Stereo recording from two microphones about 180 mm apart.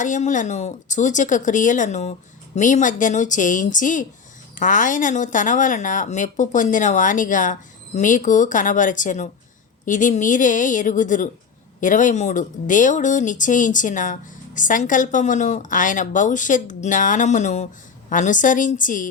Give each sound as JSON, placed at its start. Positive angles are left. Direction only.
{"t": 0.0, "sound": "speech", "side_deg": 45}